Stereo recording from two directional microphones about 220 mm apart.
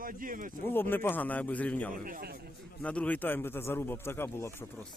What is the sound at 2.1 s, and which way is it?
Speech, 40° right (ahead or behind).